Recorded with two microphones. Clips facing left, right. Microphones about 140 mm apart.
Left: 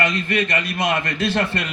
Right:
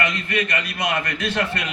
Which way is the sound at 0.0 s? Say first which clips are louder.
Left 3 dB; 30° left (ahead or behind).